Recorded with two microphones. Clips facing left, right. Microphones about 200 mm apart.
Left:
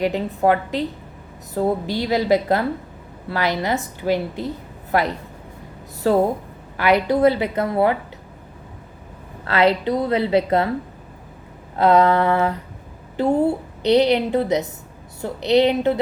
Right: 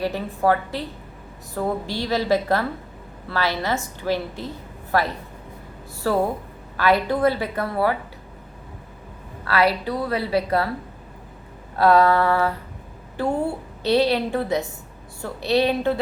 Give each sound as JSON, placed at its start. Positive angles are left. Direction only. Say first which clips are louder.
{"t": 0.0, "sound": "a woman's voice", "louder": "left 3 dB", "side_deg": 20}
{"t": 9.4, "sound": "a woman's voice", "louder": "left 3 dB", "side_deg": 25}
{"t": 11.8, "sound": "a woman's voice", "louder": "left 1 dB", "side_deg": 20}